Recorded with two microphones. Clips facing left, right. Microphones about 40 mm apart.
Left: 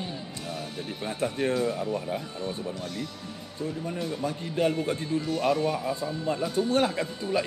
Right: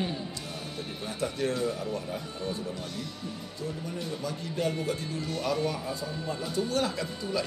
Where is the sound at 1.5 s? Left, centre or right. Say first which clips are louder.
Left 3 dB; centre.